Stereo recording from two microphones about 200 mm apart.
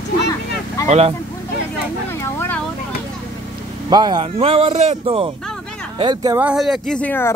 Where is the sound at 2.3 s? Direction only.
10° left (ahead or behind).